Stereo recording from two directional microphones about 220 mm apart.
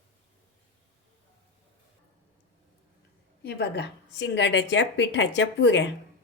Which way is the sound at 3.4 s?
50° left (ahead or behind).